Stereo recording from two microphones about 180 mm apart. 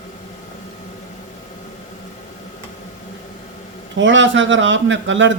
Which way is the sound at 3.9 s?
90° right.